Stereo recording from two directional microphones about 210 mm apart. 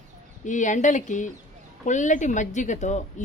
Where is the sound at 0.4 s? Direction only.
35° left (ahead or behind).